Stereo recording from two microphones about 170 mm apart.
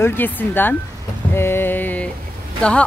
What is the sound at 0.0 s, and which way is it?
Speech, 10° left (ahead or behind).